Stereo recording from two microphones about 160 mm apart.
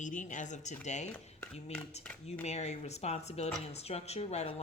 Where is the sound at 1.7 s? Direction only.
5° left (ahead or behind).